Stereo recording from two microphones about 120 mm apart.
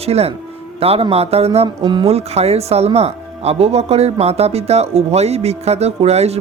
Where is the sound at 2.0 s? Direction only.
60° right (ahead or behind).